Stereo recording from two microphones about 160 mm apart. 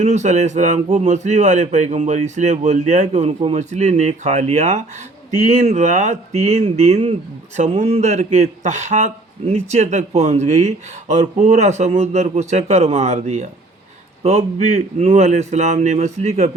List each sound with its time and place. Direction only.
0.0 s a man's voice: 45° right (ahead or behind)